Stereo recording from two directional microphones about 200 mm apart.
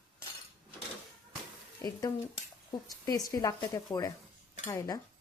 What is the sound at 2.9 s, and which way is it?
A woman's voice, 20° left (ahead or behind).